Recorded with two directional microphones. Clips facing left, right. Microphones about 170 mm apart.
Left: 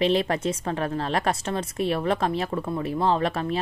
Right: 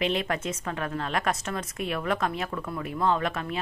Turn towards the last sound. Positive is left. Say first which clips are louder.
# left 3 dB
turn(degrees=30)  # may be behind; listen again after turning